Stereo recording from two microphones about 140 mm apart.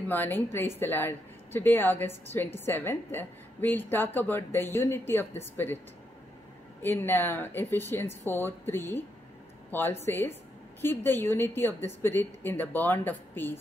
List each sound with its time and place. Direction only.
0.1 s a woman's voice: 15° left (ahead or behind)
6.8 s a woman's voice: 15° left (ahead or behind)